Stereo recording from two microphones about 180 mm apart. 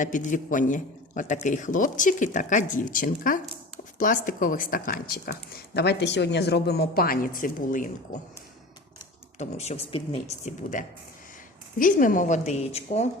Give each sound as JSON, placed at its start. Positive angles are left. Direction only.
{"t": 0.0, "sound": "a man's voice", "side_deg": 45}
{"t": 9.4, "sound": "a man's voice", "side_deg": 40}